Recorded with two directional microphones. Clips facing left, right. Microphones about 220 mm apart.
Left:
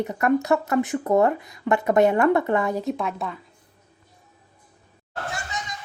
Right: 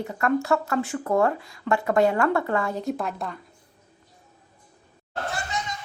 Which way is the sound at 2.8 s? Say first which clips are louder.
Left 1 dB; centre (ahead or behind).